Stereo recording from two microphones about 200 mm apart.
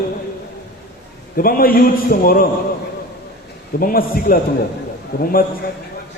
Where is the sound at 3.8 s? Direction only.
45° left (ahead or behind).